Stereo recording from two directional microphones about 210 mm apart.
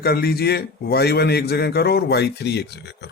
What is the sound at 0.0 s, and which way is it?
Speech, 50° left (ahead or behind).